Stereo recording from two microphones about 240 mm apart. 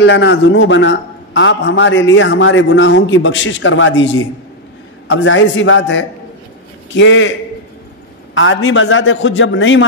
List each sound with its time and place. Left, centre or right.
0.0 s a man's voice: left
8.4 s a man's voice: left